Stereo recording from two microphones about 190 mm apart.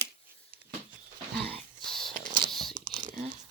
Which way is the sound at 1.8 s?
Centre (ahead or behind).